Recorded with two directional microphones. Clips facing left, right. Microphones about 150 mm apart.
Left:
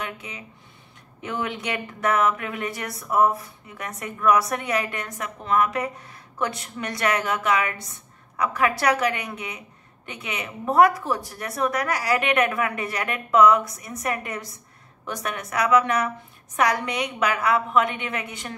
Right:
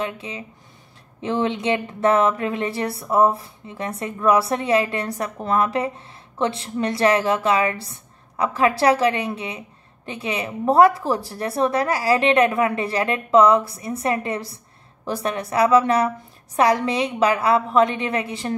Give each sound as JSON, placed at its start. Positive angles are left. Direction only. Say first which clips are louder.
{"t": 0.0, "sound": "a woman's voice", "louder": "right 6 dB", "side_deg": -30}